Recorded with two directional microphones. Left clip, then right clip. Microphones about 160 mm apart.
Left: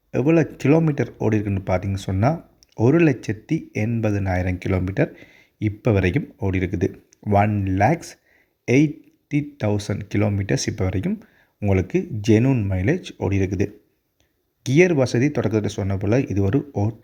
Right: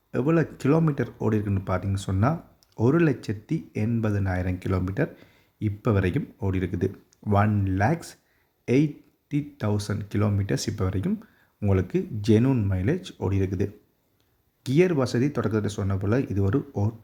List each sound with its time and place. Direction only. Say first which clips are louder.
0.1 s speech: left 5 dB; 15° left (ahead or behind)